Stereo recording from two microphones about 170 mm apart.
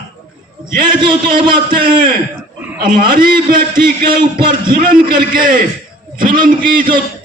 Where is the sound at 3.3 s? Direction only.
55° right (ahead or behind).